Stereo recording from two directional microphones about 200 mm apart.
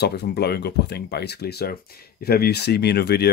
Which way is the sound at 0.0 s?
55° left (ahead or behind).